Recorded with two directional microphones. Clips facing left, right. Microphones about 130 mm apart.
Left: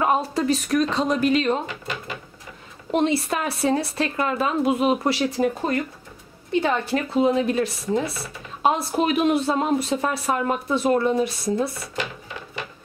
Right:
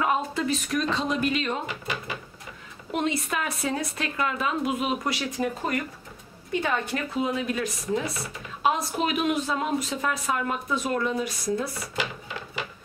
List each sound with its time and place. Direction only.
0.0 s speech: 35° left (ahead or behind)
1.7 s speech: 10° right (ahead or behind)
2.9 s speech: 30° left (ahead or behind)